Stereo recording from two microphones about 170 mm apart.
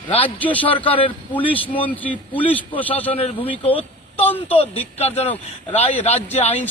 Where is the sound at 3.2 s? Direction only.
35° left (ahead or behind).